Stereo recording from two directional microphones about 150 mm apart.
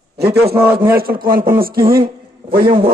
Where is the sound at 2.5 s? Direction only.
35° right (ahead or behind).